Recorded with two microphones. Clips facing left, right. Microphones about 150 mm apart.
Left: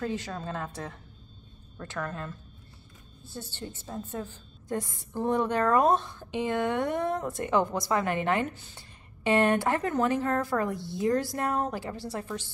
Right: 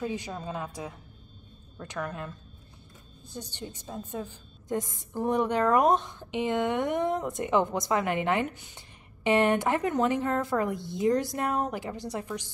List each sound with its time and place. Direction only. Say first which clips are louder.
0.0 s a woman's voice: even; 15° right (ahead or behind)